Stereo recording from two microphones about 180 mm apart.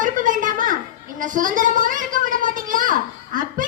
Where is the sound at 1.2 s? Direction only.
50° right (ahead or behind).